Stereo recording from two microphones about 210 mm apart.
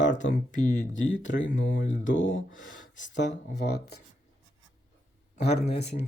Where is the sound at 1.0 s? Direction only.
60° left (ahead or behind).